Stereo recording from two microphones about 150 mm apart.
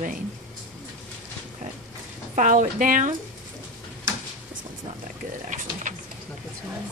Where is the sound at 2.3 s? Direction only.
55° right (ahead or behind).